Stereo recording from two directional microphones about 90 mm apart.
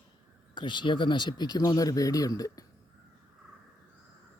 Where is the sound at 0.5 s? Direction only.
60° left (ahead or behind); by 2.7 s 40° left (ahead or behind).